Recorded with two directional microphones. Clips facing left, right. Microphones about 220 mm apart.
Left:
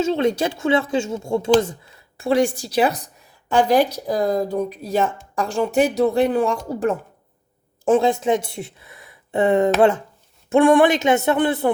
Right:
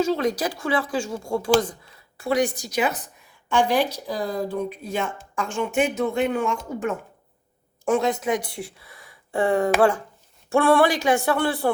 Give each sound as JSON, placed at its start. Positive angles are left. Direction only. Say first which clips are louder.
{"t": 0.0, "sound": "speech", "louder": "left 3 dB", "side_deg": 25}